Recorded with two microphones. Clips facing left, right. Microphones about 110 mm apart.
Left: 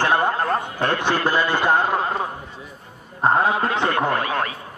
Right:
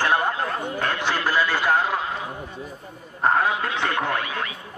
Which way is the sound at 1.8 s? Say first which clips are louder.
Left 4 dB; 45° left (ahead or behind).